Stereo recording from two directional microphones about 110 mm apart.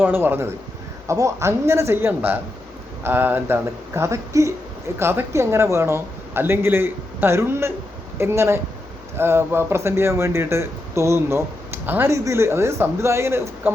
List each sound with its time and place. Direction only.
0.0 s speech: 20° right (ahead or behind)